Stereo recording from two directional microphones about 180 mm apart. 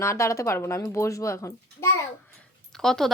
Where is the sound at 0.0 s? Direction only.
15° left (ahead or behind).